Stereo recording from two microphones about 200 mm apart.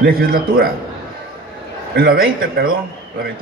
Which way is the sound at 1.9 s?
45° right (ahead or behind).